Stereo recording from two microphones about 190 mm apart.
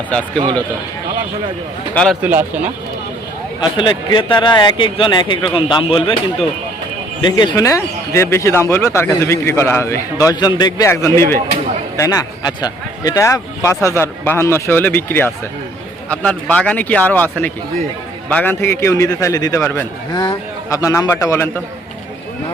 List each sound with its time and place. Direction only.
1.9 s a man's voice: 5° left (ahead or behind)
2.2 s speech: 10° right (ahead or behind)
3.6 s a man's voice: 25° left (ahead or behind)
7.2 s speech: 25° left (ahead or behind)